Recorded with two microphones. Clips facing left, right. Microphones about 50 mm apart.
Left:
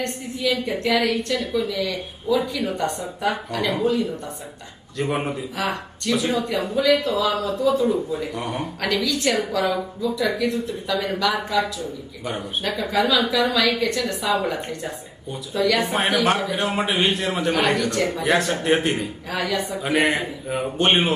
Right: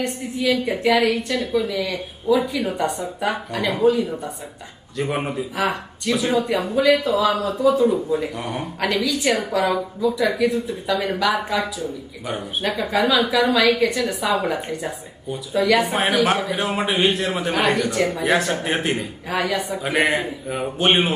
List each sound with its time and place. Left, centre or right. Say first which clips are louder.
0.0 s speech: right 2 dB; centre
4.9 s speech: right 1 dB; centre
9.3 s speech: right 3 dB; centre
9.7 s speech: right 3 dB; centre
19.3 s speech: right 3 dB; centre
19.8 s speech: even; centre